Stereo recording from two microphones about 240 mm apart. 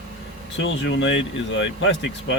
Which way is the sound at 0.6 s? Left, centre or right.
Left.